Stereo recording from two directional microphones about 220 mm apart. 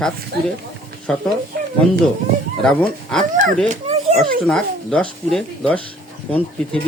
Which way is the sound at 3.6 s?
30° right (ahead or behind).